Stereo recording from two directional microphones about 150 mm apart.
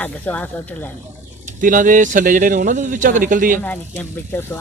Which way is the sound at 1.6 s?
65° right (ahead or behind).